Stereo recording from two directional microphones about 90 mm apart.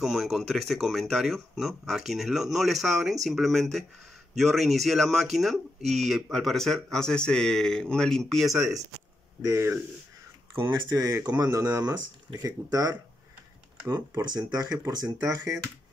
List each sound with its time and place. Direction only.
0.0 s speech: centre (ahead or behind)
8.5 s speech: 35° right (ahead or behind)
14.2 s speech: 45° right (ahead or behind)
15.2 s speech: 35° right (ahead or behind)